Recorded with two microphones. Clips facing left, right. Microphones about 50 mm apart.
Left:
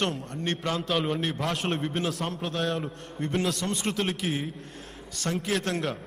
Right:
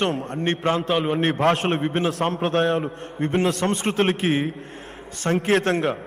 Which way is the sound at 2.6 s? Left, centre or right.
Right.